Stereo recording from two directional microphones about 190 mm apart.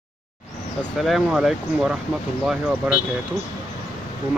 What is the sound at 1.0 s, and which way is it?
Speech, centre (ahead or behind).